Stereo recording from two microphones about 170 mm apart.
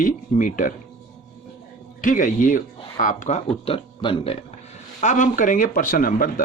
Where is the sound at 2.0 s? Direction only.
50° left (ahead or behind).